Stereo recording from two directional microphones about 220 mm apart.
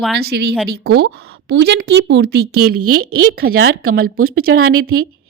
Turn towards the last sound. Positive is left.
turn(degrees=-75)  # may be behind; listen again after turning